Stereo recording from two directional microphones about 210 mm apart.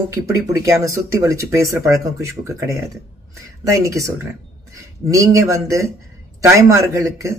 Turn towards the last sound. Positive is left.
turn(degrees=-15)  # may be behind; listen again after turning